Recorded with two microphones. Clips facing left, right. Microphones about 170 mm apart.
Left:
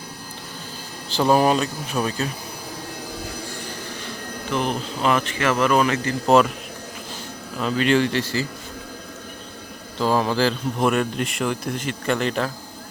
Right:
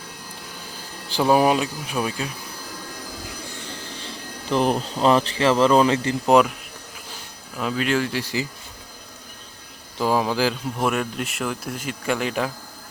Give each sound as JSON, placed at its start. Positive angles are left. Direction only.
{"t": 1.1, "sound": "speech", "side_deg": -10}
{"t": 4.5, "sound": "speech", "side_deg": -35}
{"t": 6.2, "sound": "speech", "side_deg": -15}
{"t": 7.6, "sound": "speech", "side_deg": -5}
{"t": 10.0, "sound": "speech", "side_deg": -10}